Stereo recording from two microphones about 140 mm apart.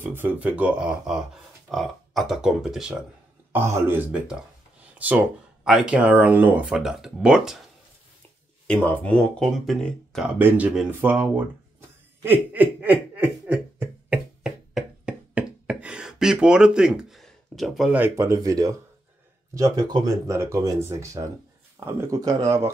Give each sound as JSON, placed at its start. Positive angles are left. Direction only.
{"t": 0.0, "sound": "speech", "side_deg": -15}
{"t": 3.5, "sound": "speech", "side_deg": -15}
{"t": 8.6, "sound": "speech", "side_deg": 10}
{"t": 10.2, "sound": "speech", "side_deg": -10}
{"t": 12.8, "sound": "a sound", "side_deg": -10}
{"t": 17.9, "sound": "speech", "side_deg": -15}